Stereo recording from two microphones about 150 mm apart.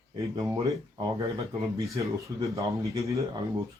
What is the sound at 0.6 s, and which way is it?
Speech, 25° right (ahead or behind).